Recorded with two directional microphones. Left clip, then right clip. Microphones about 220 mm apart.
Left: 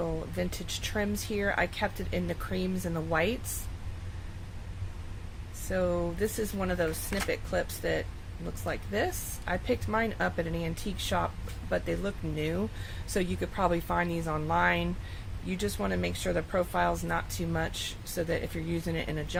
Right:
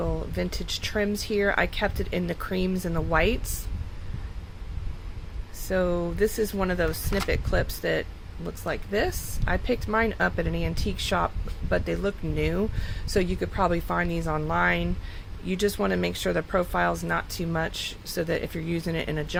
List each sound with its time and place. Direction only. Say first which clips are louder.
0.0 s speech: right 3 dB; 15° right (ahead or behind)
5.6 s speech: right 4 dB; 20° right (ahead or behind)